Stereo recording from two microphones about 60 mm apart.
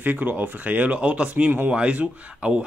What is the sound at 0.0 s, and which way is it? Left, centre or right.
A man's voice, right.